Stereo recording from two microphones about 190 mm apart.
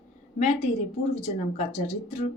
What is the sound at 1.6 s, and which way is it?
Speech, 35° left (ahead or behind).